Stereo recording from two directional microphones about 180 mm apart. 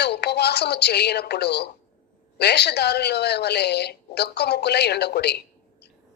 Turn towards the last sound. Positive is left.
turn(degrees=65)  # may be behind; listen again after turning